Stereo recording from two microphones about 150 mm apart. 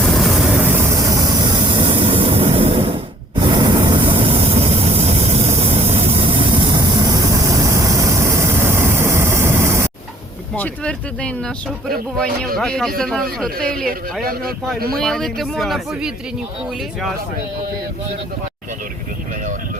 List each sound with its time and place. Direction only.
0.0 s vehicle: centre (ahead or behind); by 9.9 s 20° right (ahead or behind)
10.5 s speech: 10° left (ahead or behind)